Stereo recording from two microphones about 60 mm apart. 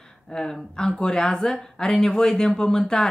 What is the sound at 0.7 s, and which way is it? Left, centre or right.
Speech, centre.